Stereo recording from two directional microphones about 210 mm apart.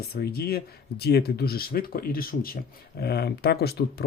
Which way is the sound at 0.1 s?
50° left (ahead or behind).